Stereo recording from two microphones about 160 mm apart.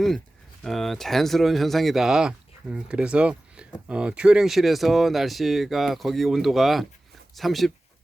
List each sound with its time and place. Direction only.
0.6 s speech: centre (ahead or behind)